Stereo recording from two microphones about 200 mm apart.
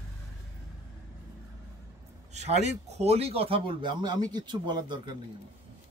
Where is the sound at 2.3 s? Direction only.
35° right (ahead or behind).